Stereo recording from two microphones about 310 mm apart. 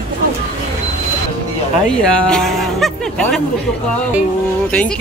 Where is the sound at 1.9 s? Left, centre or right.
Centre.